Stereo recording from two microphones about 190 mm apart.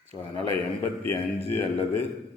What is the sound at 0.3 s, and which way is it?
Speech, 30° right (ahead or behind).